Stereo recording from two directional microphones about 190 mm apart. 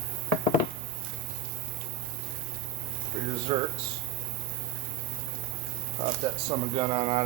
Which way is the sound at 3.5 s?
20° right (ahead or behind).